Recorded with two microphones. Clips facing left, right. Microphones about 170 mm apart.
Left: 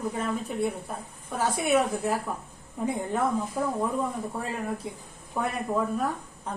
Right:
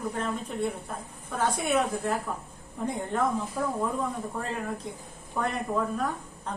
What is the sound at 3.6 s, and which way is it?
Speech, 20° left (ahead or behind).